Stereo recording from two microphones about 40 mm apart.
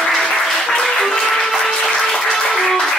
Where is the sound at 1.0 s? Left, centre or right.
Centre.